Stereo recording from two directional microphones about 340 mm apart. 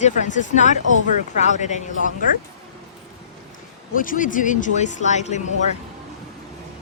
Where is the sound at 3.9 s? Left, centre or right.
Left.